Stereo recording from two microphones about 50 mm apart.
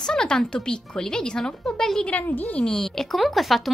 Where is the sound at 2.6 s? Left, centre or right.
Centre.